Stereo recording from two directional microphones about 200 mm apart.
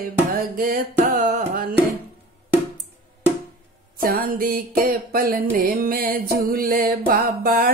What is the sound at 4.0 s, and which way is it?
Music, 45° right (ahead or behind).